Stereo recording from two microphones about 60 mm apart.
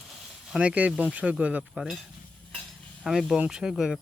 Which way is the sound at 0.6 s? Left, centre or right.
Right.